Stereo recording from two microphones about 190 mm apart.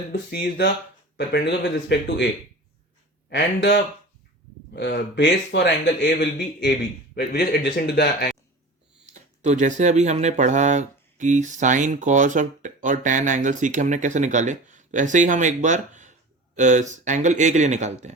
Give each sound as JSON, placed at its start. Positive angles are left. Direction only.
{"t": 0.1, "sound": "speech", "side_deg": 55}
{"t": 3.2, "sound": "speech", "side_deg": 60}
{"t": 9.4, "sound": "speech", "side_deg": -40}